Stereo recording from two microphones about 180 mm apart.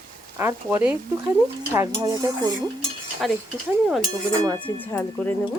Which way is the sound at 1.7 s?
20° right (ahead or behind).